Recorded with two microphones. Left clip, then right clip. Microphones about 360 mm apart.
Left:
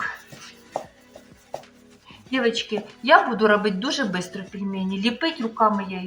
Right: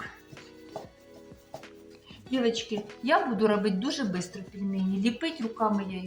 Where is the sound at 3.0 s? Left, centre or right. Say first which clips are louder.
Left 8 dB; right.